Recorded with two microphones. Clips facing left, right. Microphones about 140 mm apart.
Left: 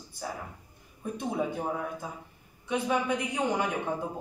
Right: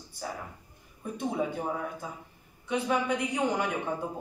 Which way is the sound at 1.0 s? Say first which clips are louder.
Even; 10° left (ahead or behind).